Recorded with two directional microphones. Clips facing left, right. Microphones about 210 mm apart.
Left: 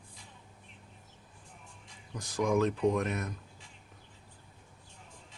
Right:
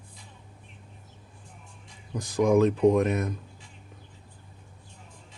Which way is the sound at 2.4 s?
20° right (ahead or behind).